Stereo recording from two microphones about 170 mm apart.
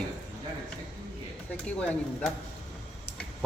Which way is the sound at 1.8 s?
5° left (ahead or behind).